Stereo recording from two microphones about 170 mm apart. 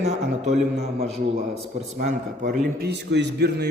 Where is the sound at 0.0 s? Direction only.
40° right (ahead or behind).